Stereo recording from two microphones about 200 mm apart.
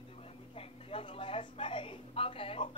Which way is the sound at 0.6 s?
30° left (ahead or behind).